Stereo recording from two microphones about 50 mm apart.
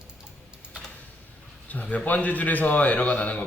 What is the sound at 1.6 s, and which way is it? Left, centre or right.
A man's voice, left.